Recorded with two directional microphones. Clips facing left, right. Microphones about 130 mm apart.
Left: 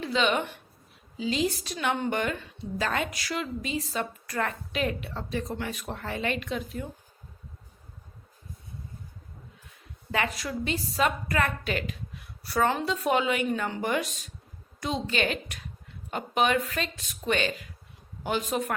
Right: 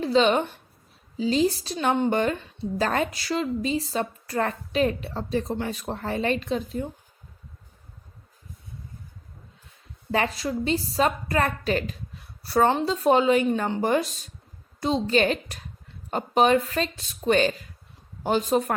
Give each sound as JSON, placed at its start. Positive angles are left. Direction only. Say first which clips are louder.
{"t": 0.0, "sound": "a woman's voice", "louder": "right 6 dB", "side_deg": -35}
{"t": 10.1, "sound": "a woman's voice", "louder": "right 4 dB", "side_deg": -30}